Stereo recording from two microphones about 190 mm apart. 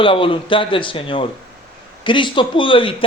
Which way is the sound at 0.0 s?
25° left (ahead or behind).